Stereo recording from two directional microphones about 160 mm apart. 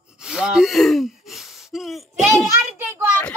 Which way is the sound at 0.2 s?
5° right (ahead or behind).